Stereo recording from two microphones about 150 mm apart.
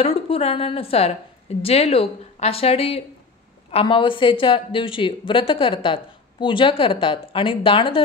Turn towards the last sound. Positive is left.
turn(degrees=35)  # may be behind; listen again after turning